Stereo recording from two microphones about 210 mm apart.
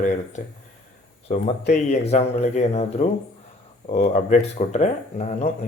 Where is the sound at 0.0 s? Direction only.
35° left (ahead or behind).